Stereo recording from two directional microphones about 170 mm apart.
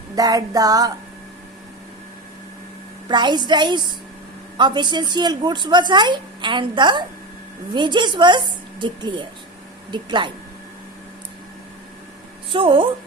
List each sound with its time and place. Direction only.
0.2 s a woman's voice: 20° right (ahead or behind)
3.1 s a woman's voice: 25° right (ahead or behind)
12.5 s a woman's voice: 30° right (ahead or behind)